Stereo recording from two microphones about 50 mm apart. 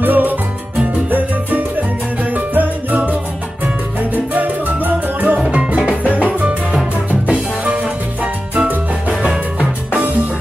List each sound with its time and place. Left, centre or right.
0.0 s music: right
1.1 s salsa music: right
2.3 s music: right
6.0 s salsa music: right
7.2 s music: right